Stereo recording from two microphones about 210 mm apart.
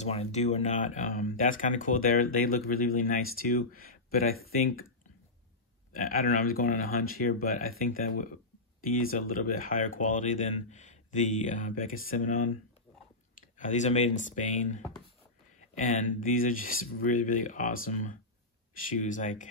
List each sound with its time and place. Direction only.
0.0 s speech: 30° left (ahead or behind)
5.9 s speech: 40° left (ahead or behind)
13.6 s speech: 35° left (ahead or behind)